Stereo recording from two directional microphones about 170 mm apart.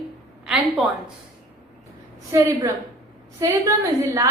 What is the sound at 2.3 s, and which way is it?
A woman's voice, 15° right (ahead or behind).